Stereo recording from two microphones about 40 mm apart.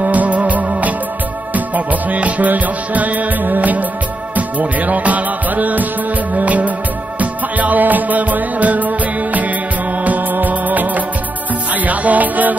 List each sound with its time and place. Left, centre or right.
0.0 s music: right